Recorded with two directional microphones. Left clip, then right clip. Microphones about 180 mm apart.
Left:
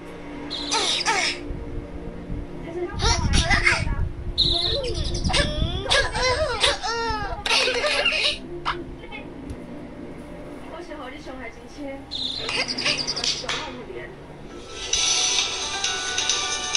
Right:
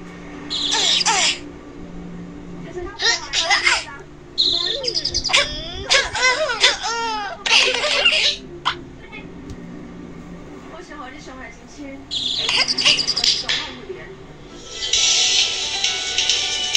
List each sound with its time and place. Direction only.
0.7 s crow: 20° left (ahead or behind)
1.0 s music: 5° right (ahead or behind)
3.0 s a sound: 20° left (ahead or behind)
3.4 s a sound: 5° right (ahead or behind)
4.4 s cricket: 20° left (ahead or behind)
4.9 s bird: 15° right (ahead or behind)
5.9 s laughter: 5° right (ahead or behind)
12.2 s insect: 5° right (ahead or behind)
13.1 s bird: 20° left (ahead or behind)
14.8 s music: 20° left (ahead or behind)